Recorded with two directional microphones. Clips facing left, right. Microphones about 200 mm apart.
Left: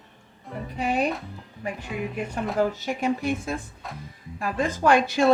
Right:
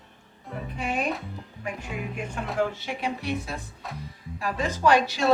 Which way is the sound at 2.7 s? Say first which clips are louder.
Left 5 dB; 40° left (ahead or behind).